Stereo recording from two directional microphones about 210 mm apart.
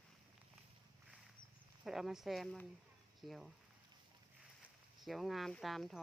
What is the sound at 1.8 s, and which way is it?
Speech, centre (ahead or behind).